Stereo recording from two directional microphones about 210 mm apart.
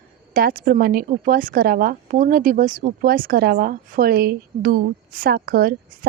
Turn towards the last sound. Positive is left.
turn(degrees=-45)  # may be behind; listen again after turning